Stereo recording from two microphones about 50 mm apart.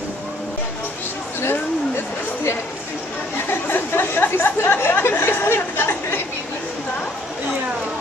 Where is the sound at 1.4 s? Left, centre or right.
Left.